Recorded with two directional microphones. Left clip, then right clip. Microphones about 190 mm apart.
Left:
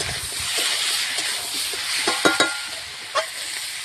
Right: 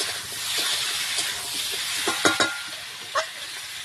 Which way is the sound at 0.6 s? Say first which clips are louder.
Left 3 dB; 35° left (ahead or behind).